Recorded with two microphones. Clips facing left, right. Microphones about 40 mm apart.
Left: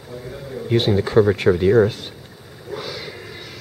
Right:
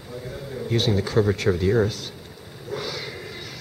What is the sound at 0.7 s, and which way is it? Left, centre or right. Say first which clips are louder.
Speech: left 6 dB; left.